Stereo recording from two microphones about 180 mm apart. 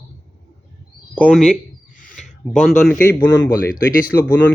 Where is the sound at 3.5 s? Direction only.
55° left (ahead or behind).